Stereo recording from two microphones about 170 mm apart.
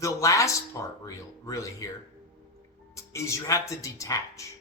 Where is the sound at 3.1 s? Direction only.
15° left (ahead or behind).